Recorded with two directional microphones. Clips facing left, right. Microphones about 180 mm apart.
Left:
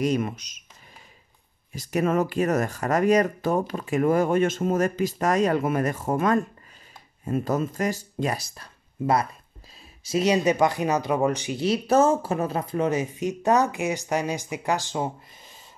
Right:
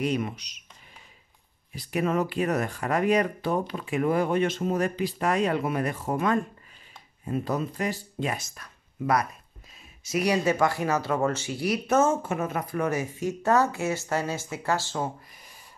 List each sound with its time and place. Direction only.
0.0 s speech: 45° left (ahead or behind)
1.7 s speech: 45° left (ahead or behind); by 15.6 s 20° left (ahead or behind)